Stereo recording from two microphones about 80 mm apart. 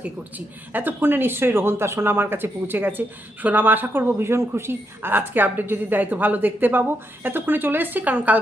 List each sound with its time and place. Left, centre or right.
0.0 s a woman's voice: right